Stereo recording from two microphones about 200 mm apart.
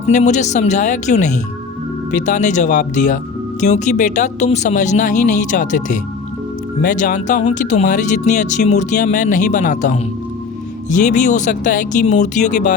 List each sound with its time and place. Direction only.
0.0 s speech: 35° left (ahead or behind)